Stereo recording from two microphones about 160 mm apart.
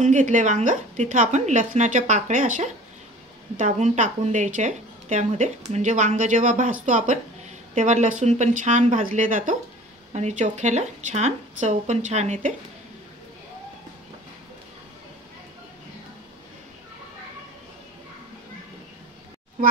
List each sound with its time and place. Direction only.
0.0 s speech: 50° right (ahead or behind)